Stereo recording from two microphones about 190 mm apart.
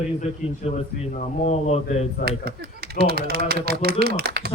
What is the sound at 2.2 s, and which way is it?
Speech, 55° right (ahead or behind).